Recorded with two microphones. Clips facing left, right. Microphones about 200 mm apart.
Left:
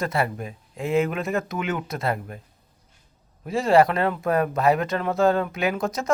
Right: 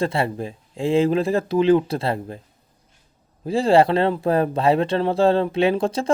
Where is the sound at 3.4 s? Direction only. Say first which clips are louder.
Right 2 dB; 30° right (ahead or behind).